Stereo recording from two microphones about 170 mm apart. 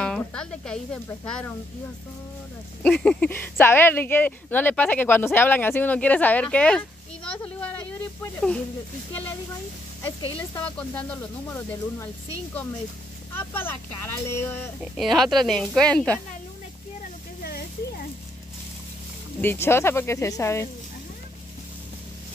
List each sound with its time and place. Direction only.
0.0 s speech: 5° left (ahead or behind)
2.8 s speech: 5° left (ahead or behind)
10.6 s speech: 10° left (ahead or behind)
13.3 s speech: 10° left (ahead or behind)
15.0 s speech: centre (ahead or behind)
17.4 s a sound: 65° left (ahead or behind)
19.4 s speech: 15° left (ahead or behind)